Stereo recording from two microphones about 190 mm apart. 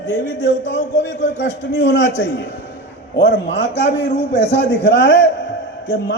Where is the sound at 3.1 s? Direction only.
60° left (ahead or behind).